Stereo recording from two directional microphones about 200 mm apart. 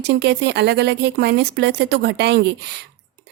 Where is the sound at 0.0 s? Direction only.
55° right (ahead or behind).